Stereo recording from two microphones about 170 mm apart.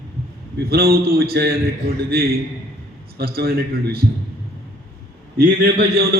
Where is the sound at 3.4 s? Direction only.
65° right (ahead or behind).